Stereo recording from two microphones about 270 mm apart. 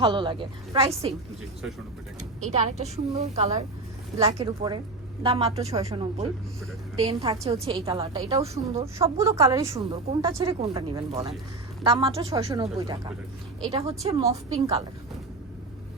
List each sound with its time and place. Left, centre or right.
0.0 s speech: centre
2.1 s a woman's voice: right
9.1 s a woman's voice: centre